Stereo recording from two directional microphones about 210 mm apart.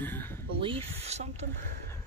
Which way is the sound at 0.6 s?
25° right (ahead or behind).